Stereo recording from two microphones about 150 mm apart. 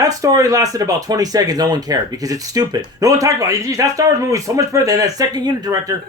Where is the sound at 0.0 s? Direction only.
25° right (ahead or behind).